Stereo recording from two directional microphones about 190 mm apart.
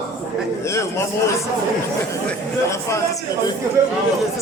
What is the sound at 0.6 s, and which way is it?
Speech, 15° left (ahead or behind).